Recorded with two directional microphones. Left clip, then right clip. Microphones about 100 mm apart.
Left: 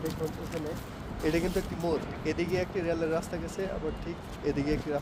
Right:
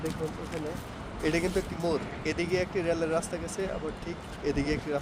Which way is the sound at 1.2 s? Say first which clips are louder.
Right 1 dB; 45° right (ahead or behind).